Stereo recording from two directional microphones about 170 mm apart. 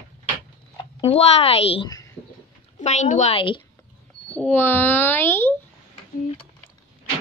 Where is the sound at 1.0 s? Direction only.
35° left (ahead or behind).